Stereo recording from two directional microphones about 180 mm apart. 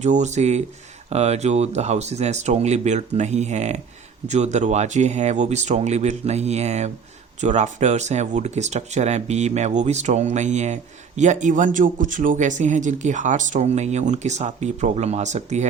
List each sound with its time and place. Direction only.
0.0 s speech: 40° right (ahead or behind)